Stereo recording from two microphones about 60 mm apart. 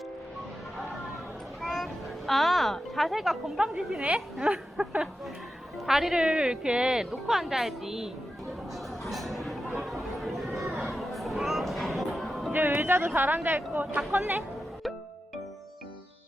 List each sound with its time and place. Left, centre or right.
1.6 s a sound: centre
4.0 s a woman's voice: centre
5.8 s a woman's voice: centre
9.0 s chatter: centre
12.5 s speech: right